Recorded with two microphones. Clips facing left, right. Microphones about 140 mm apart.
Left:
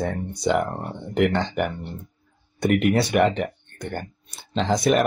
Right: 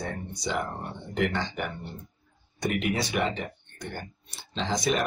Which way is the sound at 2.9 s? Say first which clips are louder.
Left 8 dB; 60° left (ahead or behind).